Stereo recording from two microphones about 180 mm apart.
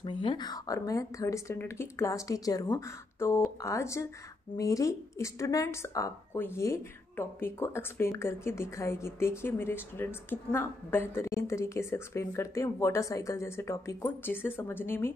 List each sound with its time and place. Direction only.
0.0 s a woman's voice: 25° left (ahead or behind)